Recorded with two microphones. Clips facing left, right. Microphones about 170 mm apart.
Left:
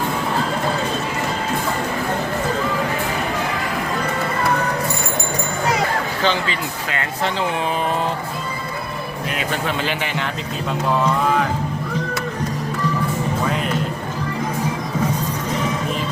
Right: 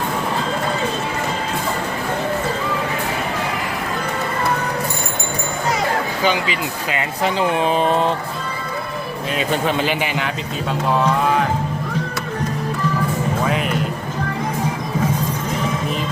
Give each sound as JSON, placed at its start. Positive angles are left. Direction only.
{"t": 6.2, "sound": "speech", "side_deg": -15}
{"t": 9.4, "sound": "speech", "side_deg": -20}